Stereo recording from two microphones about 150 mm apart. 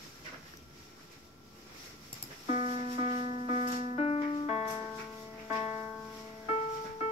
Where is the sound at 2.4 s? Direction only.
50° left (ahead or behind).